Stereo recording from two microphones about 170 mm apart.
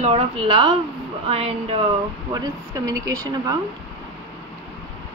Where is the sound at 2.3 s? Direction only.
20° right (ahead or behind).